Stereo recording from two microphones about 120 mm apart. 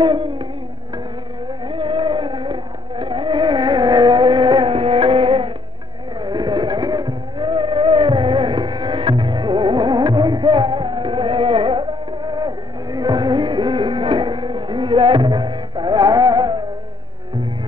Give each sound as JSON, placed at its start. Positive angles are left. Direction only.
{"t": 0.0, "sound": "music", "side_deg": -40}
{"t": 1.7, "sound": "music", "side_deg": -40}
{"t": 12.3, "sound": "music", "side_deg": -35}